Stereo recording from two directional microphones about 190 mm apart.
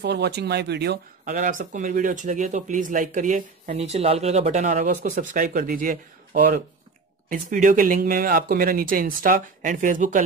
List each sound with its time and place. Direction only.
0.0 s speech: 60° right (ahead or behind)
1.2 s speech: 45° right (ahead or behind)